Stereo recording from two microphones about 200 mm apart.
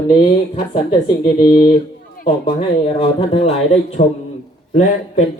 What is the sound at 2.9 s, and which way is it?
Speech, 30° left (ahead or behind).